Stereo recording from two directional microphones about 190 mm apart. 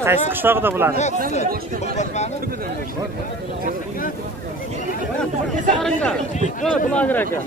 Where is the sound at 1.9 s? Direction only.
35° left (ahead or behind).